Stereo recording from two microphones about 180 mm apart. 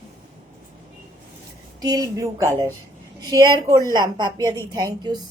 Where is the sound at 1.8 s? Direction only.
20° right (ahead or behind).